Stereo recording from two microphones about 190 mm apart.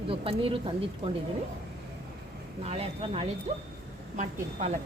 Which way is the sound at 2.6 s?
30° right (ahead or behind).